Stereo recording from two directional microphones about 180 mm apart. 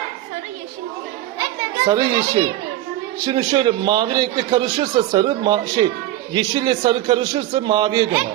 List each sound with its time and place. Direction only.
1.9 s a man's voice: 20° right (ahead or behind)